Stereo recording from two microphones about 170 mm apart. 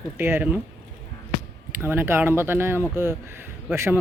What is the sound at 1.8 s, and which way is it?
Speech, 15° right (ahead or behind).